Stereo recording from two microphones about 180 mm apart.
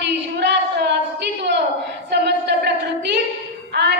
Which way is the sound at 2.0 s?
70° right (ahead or behind).